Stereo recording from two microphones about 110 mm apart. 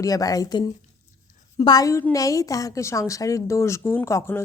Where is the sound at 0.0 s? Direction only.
30° left (ahead or behind).